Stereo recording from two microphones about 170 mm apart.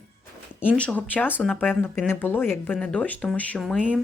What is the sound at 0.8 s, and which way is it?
A woman's voice, 10° left (ahead or behind).